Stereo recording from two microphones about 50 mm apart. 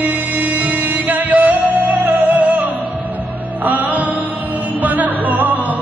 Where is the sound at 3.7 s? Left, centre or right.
Right.